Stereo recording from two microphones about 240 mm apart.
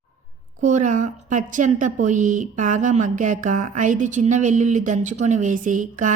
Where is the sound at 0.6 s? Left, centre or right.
Right.